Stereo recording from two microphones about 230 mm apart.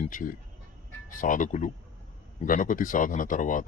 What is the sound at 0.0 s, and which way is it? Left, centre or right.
Speech, left.